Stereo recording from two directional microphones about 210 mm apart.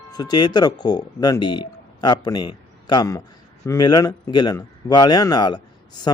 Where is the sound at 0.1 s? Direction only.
20° left (ahead or behind).